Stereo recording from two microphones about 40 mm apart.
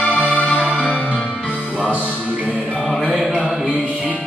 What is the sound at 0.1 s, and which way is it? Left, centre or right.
Music, right.